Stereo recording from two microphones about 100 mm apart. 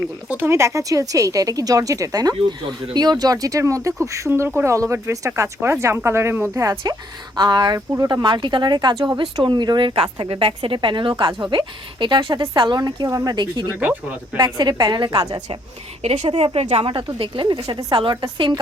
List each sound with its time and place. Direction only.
0.0 s speech: 20° right (ahead or behind)
7.3 s speech: 45° right (ahead or behind)
9.9 s a woman's voice: 65° right (ahead or behind); by 13.3 s 35° right (ahead or behind)
13.3 s speech: 50° right (ahead or behind)
13.7 s speech: 15° right (ahead or behind)
14.3 s speech: 45° right (ahead or behind)
16.3 s speech: 80° right
16.8 s a woman's voice: 55° right (ahead or behind)